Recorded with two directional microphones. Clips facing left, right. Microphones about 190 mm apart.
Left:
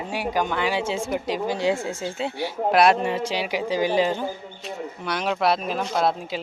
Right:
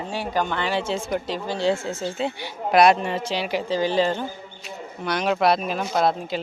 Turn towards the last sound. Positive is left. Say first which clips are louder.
# right 1 dB
turn(degrees=5)  # may be behind; listen again after turning